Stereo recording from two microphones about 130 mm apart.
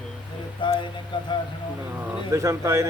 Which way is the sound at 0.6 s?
35° left (ahead or behind).